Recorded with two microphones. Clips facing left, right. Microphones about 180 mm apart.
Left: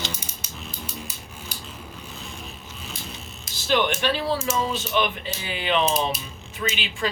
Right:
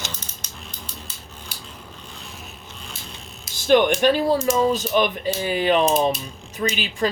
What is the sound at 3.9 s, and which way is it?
Speech, 45° right (ahead or behind).